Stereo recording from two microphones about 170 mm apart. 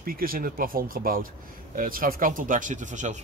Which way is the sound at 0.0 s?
60° right (ahead or behind).